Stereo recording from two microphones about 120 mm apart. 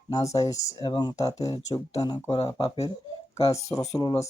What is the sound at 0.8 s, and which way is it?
Speech, 35° left (ahead or behind).